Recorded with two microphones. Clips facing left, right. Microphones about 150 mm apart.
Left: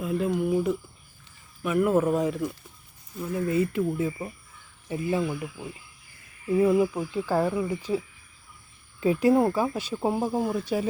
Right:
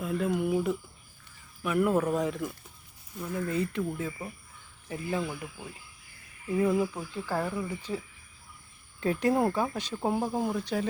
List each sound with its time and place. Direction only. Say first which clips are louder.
0.0 s speech: left 3 dB; centre (ahead or behind)